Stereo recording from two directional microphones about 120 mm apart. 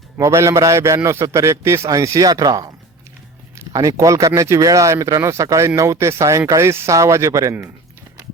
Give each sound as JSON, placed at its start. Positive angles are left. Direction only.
{"t": 0.2, "sound": "speech", "side_deg": -25}